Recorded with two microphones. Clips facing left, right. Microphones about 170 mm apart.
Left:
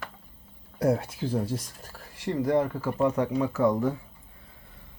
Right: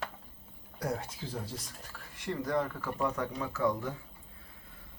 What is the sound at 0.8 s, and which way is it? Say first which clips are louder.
Speech: left 10 dB; 60° left (ahead or behind).